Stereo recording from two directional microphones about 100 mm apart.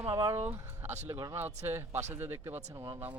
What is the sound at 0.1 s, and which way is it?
Speech, 30° right (ahead or behind).